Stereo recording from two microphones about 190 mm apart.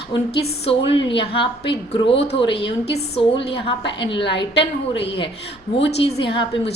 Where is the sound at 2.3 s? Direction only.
65° left (ahead or behind).